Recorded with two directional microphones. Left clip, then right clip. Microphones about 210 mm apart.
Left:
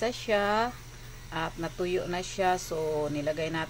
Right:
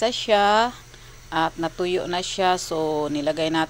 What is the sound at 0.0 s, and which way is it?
A woman's voice, 20° right (ahead or behind).